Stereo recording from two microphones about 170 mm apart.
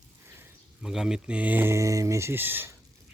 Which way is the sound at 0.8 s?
5° right (ahead or behind).